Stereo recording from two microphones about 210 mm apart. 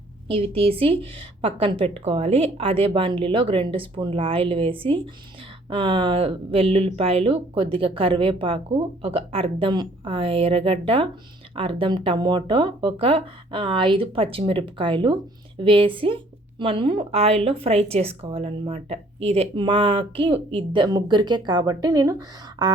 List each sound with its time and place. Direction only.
0.3 s speech: 25° right (ahead or behind)